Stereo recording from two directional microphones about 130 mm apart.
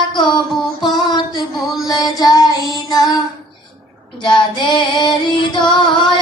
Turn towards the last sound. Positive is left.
turn(degrees=35)  # may be behind; listen again after turning